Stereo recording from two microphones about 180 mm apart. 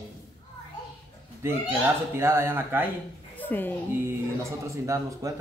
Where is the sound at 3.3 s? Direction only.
10° left (ahead or behind).